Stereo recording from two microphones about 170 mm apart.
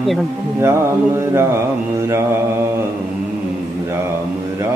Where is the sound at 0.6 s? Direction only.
15° right (ahead or behind).